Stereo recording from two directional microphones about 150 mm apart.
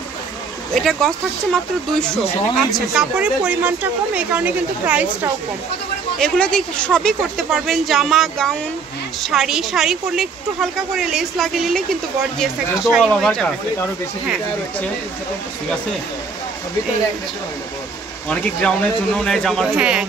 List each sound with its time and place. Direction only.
0.7 s a woman's voice: 5° left (ahead or behind)
6.1 s speech: 5° left (ahead or behind)
18.3 s speech: 5° left (ahead or behind)
19.7 s a woman's voice: 5° right (ahead or behind)